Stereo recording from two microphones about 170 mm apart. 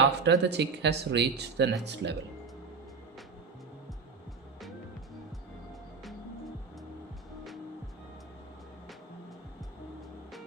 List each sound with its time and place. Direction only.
0.2 s speech: 90° right